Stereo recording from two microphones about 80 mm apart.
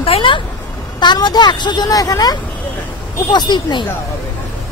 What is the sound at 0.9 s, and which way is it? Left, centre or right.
Speech, left.